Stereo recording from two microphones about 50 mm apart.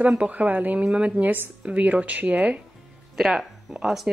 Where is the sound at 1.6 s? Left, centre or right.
Right.